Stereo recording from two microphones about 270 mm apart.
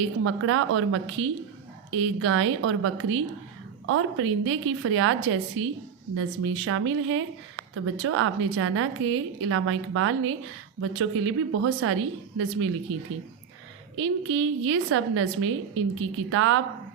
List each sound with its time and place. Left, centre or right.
0.0 s a woman's voice: right
13.9 s a woman's voice: right